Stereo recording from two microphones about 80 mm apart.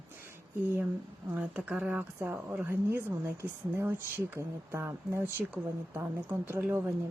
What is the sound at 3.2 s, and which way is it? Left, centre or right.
Speech, right.